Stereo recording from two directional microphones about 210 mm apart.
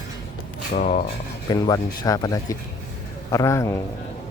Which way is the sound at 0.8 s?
35° left (ahead or behind).